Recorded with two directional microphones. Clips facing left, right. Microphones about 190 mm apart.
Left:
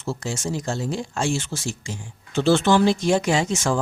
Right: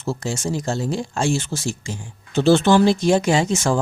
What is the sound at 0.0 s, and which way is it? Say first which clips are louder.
Speech: right 3 dB; 35° right (ahead or behind).